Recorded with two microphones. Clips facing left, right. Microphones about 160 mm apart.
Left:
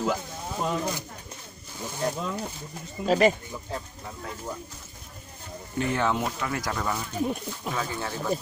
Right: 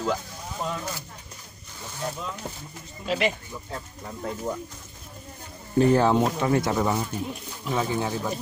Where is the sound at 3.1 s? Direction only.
40° left (ahead or behind).